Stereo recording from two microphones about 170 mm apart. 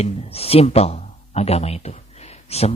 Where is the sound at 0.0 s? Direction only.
35° left (ahead or behind).